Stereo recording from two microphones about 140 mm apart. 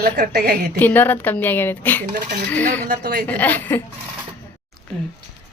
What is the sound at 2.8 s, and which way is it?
Speech, 90° right.